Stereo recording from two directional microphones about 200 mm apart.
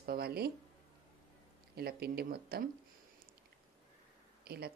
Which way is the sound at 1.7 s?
50° right (ahead or behind).